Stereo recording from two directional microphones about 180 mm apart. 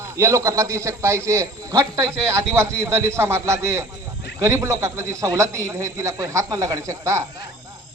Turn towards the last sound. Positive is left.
turn(degrees=-15)  # may be behind; listen again after turning